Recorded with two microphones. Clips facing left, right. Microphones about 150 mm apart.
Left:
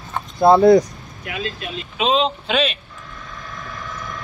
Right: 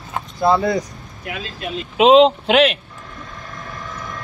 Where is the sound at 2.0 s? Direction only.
75° right (ahead or behind).